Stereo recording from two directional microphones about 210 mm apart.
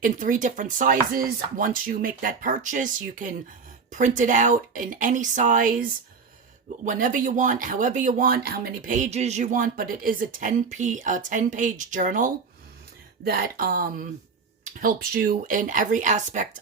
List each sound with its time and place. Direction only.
0.0 s speech: 40° right (ahead or behind)